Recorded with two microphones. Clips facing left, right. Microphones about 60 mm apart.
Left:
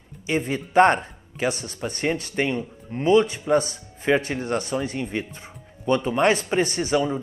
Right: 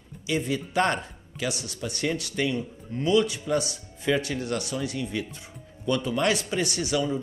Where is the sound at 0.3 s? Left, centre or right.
Left.